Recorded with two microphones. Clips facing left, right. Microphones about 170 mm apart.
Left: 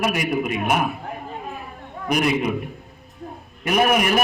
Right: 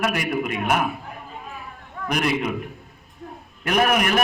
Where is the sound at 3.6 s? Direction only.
5° left (ahead or behind).